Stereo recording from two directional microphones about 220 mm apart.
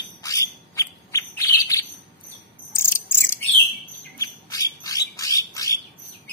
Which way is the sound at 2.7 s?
10° left (ahead or behind).